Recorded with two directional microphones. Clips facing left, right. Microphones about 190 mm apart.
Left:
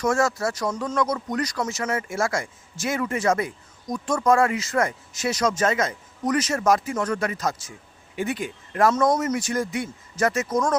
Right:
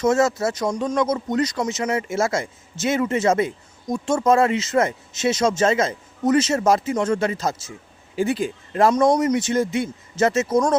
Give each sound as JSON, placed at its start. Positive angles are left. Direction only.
{"t": 0.0, "sound": "speech", "side_deg": -20}